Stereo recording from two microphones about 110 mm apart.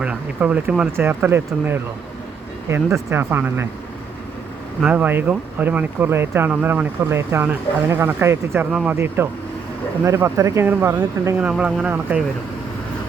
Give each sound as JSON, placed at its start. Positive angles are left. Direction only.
{"t": 0.0, "sound": "speech", "side_deg": -10}
{"t": 0.9, "sound": "speech", "side_deg": -20}
{"t": 4.8, "sound": "speech", "side_deg": -10}
{"t": 11.3, "sound": "speech", "side_deg": -10}
{"t": 12.1, "sound": "speech", "side_deg": -20}